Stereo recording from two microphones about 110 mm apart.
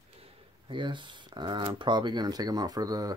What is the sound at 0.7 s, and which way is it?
Speech, 45° right (ahead or behind).